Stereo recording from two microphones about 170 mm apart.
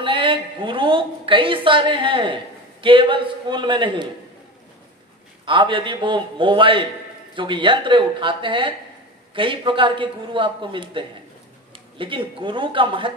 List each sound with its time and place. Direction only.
0.0 s a woman's voice: 30° right (ahead or behind)
5.4 s a woman's voice: 30° right (ahead or behind)